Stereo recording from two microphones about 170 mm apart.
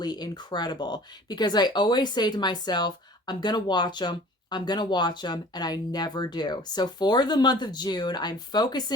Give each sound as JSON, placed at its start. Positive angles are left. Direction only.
{"t": 0.0, "sound": "speech", "side_deg": 25}